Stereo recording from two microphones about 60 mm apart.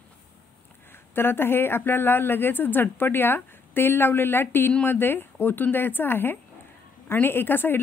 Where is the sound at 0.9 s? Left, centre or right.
Left.